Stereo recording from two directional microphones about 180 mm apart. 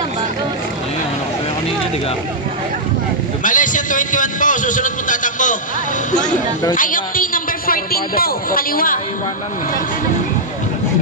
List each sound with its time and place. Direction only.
3.4 s a man's voice: 45° left (ahead or behind)
6.7 s a woman's voice: 50° left (ahead or behind)